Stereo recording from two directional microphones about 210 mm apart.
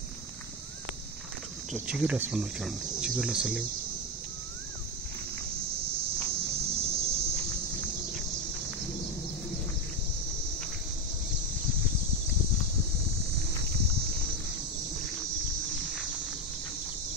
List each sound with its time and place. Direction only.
1.7 s speech: centre (ahead or behind)
6.3 s cricket: 30° right (ahead or behind)
6.9 s a sound: 15° right (ahead or behind)